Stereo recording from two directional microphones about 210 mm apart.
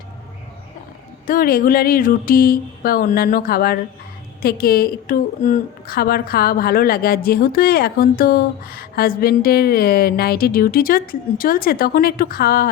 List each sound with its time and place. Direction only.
1.3 s a woman's voice: 45° left (ahead or behind)